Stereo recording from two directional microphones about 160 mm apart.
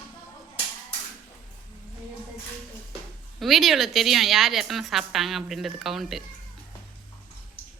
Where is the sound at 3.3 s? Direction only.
Centre (ahead or behind).